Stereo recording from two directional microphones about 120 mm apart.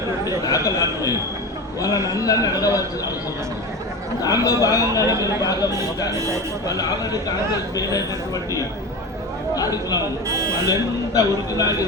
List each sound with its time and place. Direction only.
0.3 s speech: 30° left (ahead or behind)
4.2 s speech: 30° left (ahead or behind)
6.7 s speech: 30° left (ahead or behind)
9.6 s speech: 30° left (ahead or behind)
10.2 s speech: 25° right (ahead or behind)
10.7 s speech: 30° left (ahead or behind)